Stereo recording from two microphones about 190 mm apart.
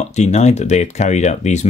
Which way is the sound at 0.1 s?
35° left (ahead or behind).